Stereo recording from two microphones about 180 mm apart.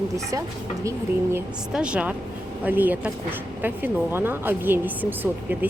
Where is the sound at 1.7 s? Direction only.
5° right (ahead or behind).